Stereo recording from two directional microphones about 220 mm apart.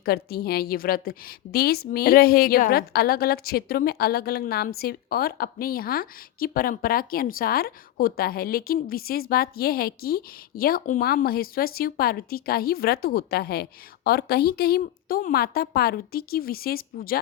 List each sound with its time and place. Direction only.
0.0 s a woman's voice: 45° left (ahead or behind)